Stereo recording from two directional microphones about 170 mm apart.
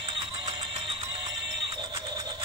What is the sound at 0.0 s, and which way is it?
Music, 30° right (ahead or behind).